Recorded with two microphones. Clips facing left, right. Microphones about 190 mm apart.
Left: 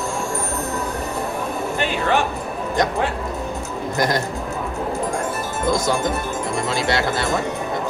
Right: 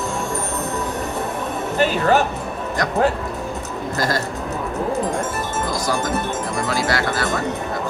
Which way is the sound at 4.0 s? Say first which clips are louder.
Left 2 dB; 20° left (ahead or behind).